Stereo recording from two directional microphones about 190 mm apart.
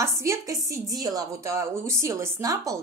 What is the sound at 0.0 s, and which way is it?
A woman's voice, 15° right (ahead or behind).